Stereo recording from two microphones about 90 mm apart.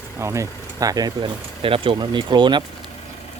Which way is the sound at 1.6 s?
85° right.